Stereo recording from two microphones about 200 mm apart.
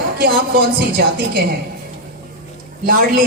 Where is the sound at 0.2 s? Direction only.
45° right (ahead or behind).